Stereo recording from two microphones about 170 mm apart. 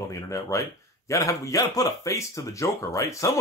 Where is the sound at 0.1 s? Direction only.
20° left (ahead or behind).